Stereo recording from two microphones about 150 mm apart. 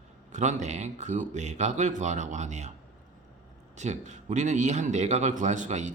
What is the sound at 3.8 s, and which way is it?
Speech, 50° right (ahead or behind).